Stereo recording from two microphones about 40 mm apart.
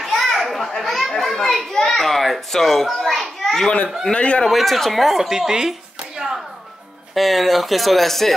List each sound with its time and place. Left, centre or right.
0.3 s children playing: centre
1.7 s a sound: centre
4.0 s a man's voice: left
4.5 s speech: centre
5.3 s a sound: centre
7.2 s speech: centre